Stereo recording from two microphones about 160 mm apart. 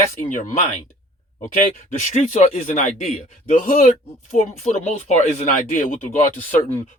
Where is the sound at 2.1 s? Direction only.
50° left (ahead or behind).